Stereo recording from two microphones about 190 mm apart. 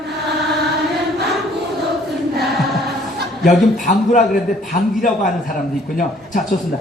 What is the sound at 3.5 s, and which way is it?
Speech, 40° left (ahead or behind).